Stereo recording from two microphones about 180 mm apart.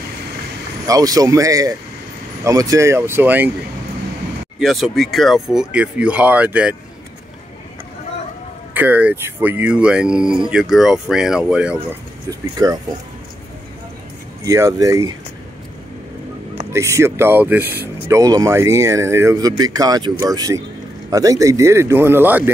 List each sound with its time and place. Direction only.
0.8 s speech: 20° right (ahead or behind)
4.6 s speech: centre (ahead or behind)
8.7 s speech: 10° right (ahead or behind)
12.3 s speech: 20° right (ahead or behind)
14.4 s speech: 20° right (ahead or behind)
16.7 s speech: 15° right (ahead or behind)